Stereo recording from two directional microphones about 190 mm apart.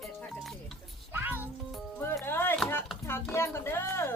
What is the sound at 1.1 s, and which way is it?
Music, 10° right (ahead or behind).